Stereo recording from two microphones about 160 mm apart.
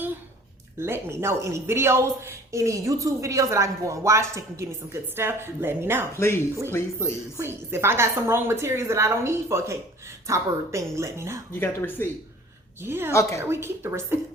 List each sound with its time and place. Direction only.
0.8 s a woman's voice: 15° right (ahead or behind)
6.1 s speech: 15° left (ahead or behind)
7.3 s a woman's voice: 15° right (ahead or behind)
12.0 s speech: 15° left (ahead or behind)
12.8 s a woman's voice: 15° right (ahead or behind)
13.1 s speech: 15° left (ahead or behind)
13.4 s a woman's voice: 15° right (ahead or behind)